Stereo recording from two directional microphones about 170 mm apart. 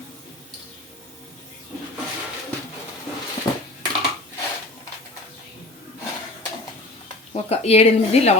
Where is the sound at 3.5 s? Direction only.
20° left (ahead or behind).